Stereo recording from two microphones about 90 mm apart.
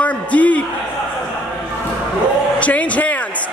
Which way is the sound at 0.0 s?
15° left (ahead or behind).